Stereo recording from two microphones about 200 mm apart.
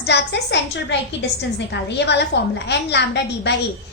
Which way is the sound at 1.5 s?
60° left (ahead or behind).